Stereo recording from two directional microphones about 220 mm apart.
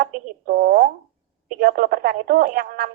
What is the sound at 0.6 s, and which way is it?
Speech, 40° right (ahead or behind).